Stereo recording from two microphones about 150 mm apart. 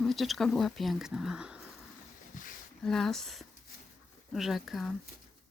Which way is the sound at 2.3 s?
65° left (ahead or behind).